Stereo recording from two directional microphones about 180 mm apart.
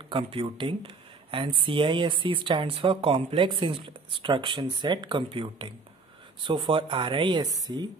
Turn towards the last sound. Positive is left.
turn(degrees=-20)  # may be behind; listen again after turning